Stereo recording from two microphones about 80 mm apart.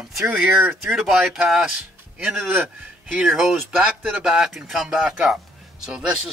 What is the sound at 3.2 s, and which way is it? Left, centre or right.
Speech, centre.